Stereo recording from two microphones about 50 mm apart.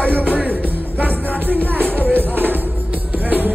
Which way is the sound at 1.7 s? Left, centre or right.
Right.